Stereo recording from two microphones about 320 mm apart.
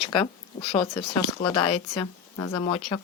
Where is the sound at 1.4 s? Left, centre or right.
Left.